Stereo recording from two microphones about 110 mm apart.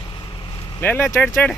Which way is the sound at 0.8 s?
20° left (ahead or behind).